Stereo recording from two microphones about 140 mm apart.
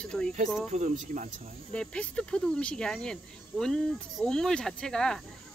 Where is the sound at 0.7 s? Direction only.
60° right (ahead or behind).